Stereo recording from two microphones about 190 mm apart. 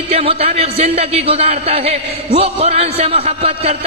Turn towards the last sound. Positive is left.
turn(degrees=-30)  # may be behind; listen again after turning